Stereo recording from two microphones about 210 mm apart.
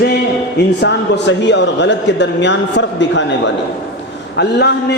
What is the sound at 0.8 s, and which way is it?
A man's voice, 55° left (ahead or behind).